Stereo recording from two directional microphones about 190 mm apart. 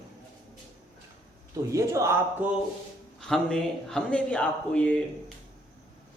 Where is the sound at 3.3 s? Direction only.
Centre (ahead or behind).